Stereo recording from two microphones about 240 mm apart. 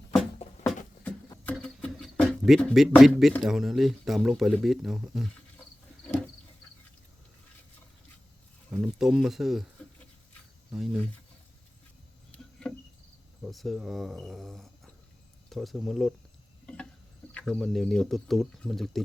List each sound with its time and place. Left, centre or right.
0.4 s a sound: left
1.5 s speech: centre
8.7 s speech: centre
10.7 s speech: centre
12.6 s cricket: centre
13.4 s speech: centre
17.3 s speech: centre